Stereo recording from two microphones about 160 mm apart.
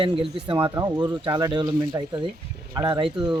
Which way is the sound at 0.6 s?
20° right (ahead or behind).